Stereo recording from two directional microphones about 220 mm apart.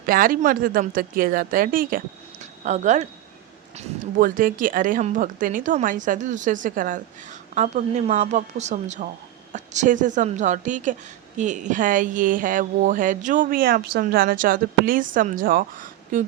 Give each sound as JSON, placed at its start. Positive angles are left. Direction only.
{"t": 0.0, "sound": "speech", "side_deg": -40}